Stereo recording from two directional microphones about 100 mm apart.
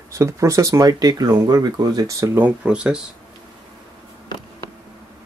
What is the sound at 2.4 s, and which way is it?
Speech, 10° right (ahead or behind).